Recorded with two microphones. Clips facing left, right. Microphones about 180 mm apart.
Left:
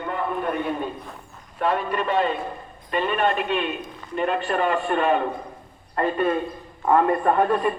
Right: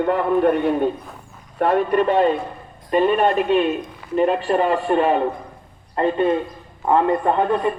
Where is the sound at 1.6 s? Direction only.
50° right (ahead or behind).